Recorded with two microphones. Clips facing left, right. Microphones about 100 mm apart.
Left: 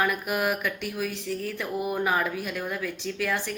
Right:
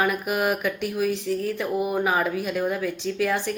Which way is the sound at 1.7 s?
10° right (ahead or behind).